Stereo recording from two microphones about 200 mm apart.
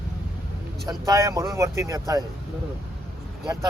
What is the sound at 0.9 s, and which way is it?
Speech, 15° right (ahead or behind).